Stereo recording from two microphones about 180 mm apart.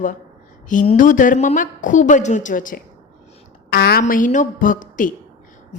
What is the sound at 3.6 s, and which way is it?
Speech, 60° left (ahead or behind).